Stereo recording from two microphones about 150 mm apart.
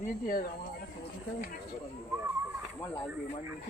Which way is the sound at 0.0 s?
75° left (ahead or behind).